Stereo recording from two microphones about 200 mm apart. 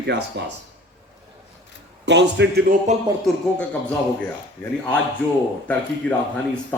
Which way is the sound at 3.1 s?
20° right (ahead or behind).